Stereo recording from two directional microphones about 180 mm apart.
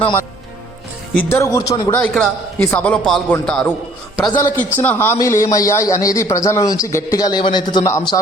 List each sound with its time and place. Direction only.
1.1 s a man's voice: 15° left (ahead or behind)
1.9 s a man's voice: 5° left (ahead or behind)
4.3 s a man's voice: 20° left (ahead or behind)
4.5 s a man's voice: 10° left (ahead or behind)